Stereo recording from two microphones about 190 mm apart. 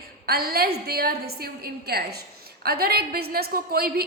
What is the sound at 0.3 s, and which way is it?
A woman's voice, 55° right (ahead or behind).